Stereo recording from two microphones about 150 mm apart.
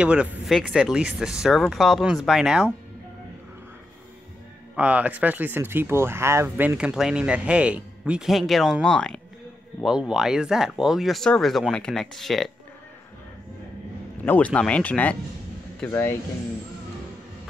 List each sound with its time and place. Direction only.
0.0 s speech: 5° right (ahead or behind)
4.7 s speech: 10° right (ahead or behind)
14.2 s speech: 10° left (ahead or behind)